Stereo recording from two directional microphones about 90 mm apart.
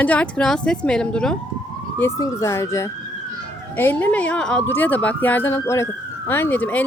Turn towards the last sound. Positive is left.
turn(degrees=20)  # may be behind; listen again after turning